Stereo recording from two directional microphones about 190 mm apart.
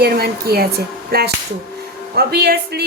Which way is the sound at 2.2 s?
55° right (ahead or behind).